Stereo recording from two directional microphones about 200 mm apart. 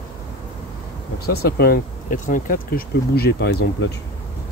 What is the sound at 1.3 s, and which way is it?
Speech, 50° left (ahead or behind).